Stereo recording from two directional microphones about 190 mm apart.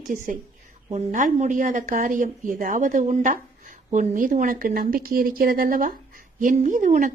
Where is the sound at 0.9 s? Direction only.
40° right (ahead or behind).